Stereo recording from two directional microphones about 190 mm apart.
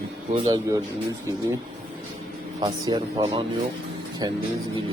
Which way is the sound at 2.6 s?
25° right (ahead or behind).